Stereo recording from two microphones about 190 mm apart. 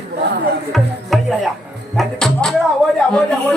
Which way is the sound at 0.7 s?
Centre (ahead or behind).